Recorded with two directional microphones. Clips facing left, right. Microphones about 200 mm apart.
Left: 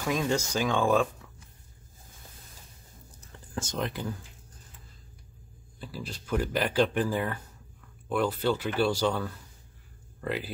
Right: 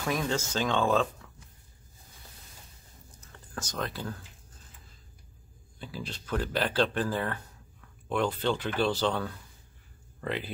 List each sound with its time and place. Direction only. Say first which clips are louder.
0.0 s speech: left 2 dB; 15° left (ahead or behind)
3.2 s whispering: left 4 dB; 30° left (ahead or behind)
3.7 s speech: left 2 dB; 15° left (ahead or behind)
5.8 s speech: even; 5° left (ahead or behind)